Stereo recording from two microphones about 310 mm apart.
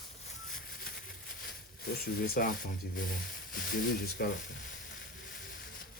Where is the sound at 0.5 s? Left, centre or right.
Left.